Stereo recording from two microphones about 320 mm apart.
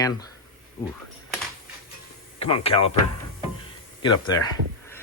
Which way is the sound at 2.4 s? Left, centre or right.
Centre.